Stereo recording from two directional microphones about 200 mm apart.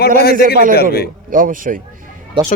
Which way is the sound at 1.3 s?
45° right (ahead or behind).